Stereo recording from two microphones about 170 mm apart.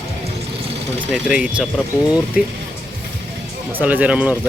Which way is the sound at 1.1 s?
5° right (ahead or behind).